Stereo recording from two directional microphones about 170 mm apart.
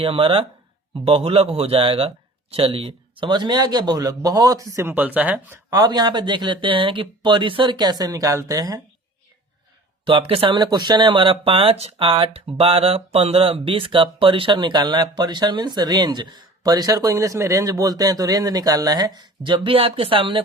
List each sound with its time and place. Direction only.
0.0 s speech: 30° right (ahead or behind); by 5.5 s 10° right (ahead or behind)
5.7 s speech: 25° right (ahead or behind)
10.0 s speech: 30° right (ahead or behind)